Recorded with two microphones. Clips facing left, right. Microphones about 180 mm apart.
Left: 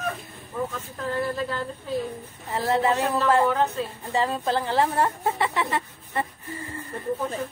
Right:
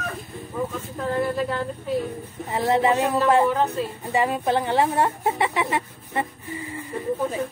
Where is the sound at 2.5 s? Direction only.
20° right (ahead or behind).